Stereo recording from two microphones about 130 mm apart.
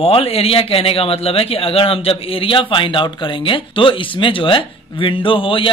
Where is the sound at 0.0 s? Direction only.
45° left (ahead or behind).